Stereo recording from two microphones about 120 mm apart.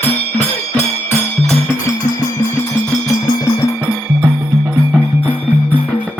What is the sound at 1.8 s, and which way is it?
Music, 25° left (ahead or behind).